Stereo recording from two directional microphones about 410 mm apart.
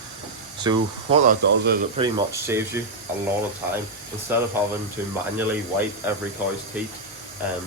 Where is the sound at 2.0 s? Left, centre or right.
Centre.